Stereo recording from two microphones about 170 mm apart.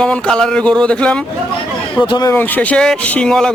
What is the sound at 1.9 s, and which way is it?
Speech, 25° left (ahead or behind).